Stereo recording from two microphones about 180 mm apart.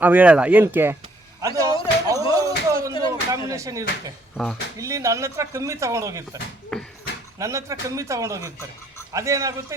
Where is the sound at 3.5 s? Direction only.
15° right (ahead or behind).